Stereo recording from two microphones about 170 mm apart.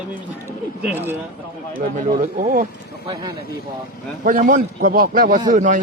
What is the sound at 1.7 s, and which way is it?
Speech, 50° right (ahead or behind).